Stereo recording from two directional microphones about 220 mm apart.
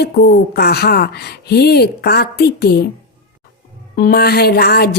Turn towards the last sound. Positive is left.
turn(degrees=45)  # may be behind; listen again after turning